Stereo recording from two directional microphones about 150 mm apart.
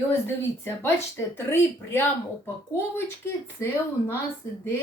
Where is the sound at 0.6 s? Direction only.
15° left (ahead or behind).